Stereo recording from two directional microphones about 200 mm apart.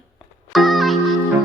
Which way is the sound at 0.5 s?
Centre (ahead or behind).